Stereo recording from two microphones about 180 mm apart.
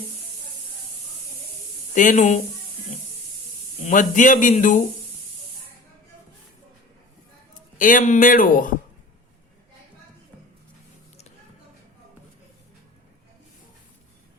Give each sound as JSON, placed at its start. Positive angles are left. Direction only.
{"t": 2.0, "sound": "speech", "side_deg": 45}
{"t": 3.8, "sound": "speech", "side_deg": 45}
{"t": 7.8, "sound": "speech", "side_deg": 50}